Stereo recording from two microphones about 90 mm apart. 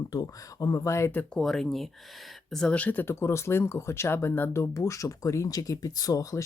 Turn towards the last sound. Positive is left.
turn(degrees=35)  # may be behind; listen again after turning